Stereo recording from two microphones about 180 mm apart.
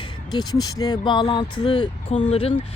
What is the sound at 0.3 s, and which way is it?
Speech, 20° left (ahead or behind).